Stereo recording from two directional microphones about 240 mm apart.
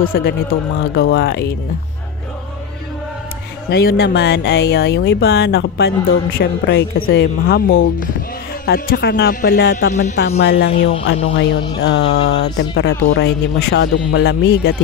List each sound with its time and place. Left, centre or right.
0.0 s speech: left
3.7 s speech: left
11.8 s speech: left